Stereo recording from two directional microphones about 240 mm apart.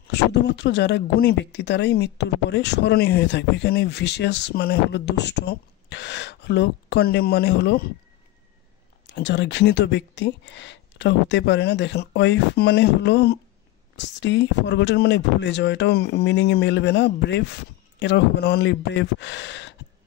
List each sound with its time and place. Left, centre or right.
0.1 s speech: left
9.1 s speech: left